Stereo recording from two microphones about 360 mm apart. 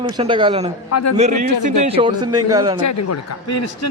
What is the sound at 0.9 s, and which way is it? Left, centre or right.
Speech, left.